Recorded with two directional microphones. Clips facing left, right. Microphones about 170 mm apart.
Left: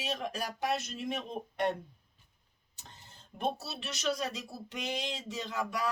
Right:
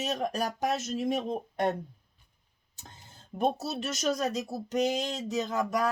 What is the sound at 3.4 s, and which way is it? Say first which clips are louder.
Speech: right 6 dB; 40° right (ahead or behind).